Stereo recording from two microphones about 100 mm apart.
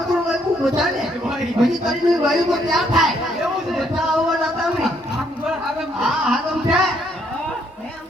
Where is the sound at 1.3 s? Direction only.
5° right (ahead or behind).